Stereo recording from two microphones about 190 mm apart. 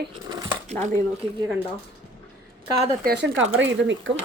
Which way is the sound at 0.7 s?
40° right (ahead or behind).